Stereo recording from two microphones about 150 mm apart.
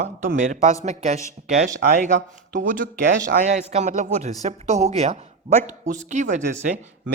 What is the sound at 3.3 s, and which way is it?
Speech, 50° right (ahead or behind).